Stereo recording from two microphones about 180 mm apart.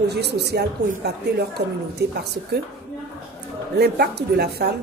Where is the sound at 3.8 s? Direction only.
65° right (ahead or behind).